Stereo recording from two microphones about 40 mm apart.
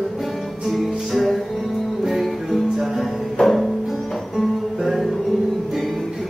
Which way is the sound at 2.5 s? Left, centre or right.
Centre.